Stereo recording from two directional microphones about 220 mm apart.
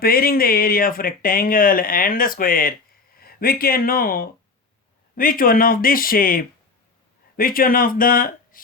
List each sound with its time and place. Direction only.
0.0 s speech: 45° left (ahead or behind)